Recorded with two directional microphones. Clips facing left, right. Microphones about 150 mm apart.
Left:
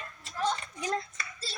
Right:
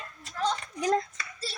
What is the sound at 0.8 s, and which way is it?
Speech, 45° right (ahead or behind).